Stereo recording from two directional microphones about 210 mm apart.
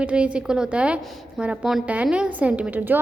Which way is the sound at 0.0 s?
5° right (ahead or behind).